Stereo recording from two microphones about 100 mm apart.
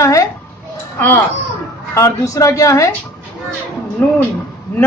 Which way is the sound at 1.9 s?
35° left (ahead or behind).